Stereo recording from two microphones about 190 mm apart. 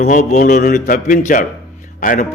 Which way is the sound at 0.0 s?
40° left (ahead or behind).